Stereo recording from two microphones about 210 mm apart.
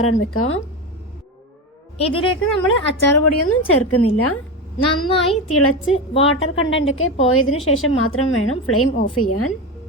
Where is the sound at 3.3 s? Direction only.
90° left.